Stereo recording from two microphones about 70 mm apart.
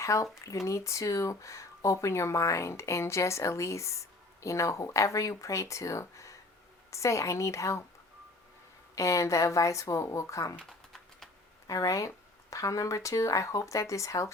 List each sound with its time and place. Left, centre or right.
0.0 s speech: left
9.0 s speech: left
10.7 s typing: centre
11.7 s speech: left